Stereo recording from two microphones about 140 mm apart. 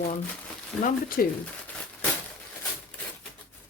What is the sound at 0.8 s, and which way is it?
Speech, 90° left.